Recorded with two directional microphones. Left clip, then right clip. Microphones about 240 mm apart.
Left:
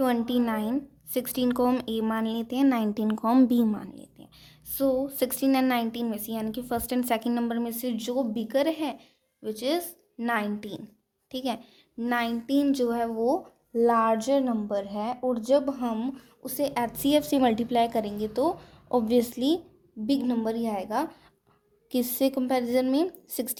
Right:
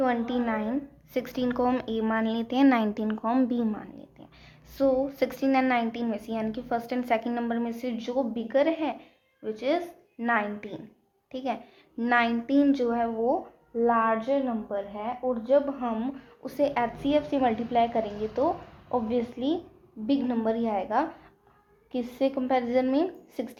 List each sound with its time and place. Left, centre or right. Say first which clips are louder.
0.0 s a woman's voice: left 1 dB; left